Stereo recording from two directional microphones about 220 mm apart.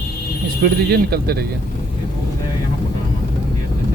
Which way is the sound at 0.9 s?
45° right (ahead or behind).